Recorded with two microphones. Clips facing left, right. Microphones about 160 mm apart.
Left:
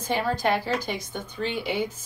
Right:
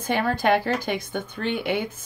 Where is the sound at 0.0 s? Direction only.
60° right (ahead or behind).